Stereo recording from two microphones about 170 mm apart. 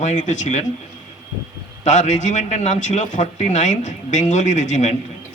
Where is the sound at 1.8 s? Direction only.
45° left (ahead or behind).